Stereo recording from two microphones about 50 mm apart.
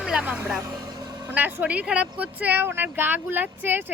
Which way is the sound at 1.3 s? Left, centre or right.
Right.